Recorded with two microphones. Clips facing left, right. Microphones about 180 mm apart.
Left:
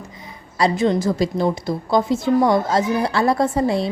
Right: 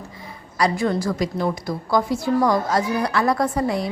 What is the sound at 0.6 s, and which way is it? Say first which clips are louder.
A woman's voice: left 3 dB; 20° left (ahead or behind).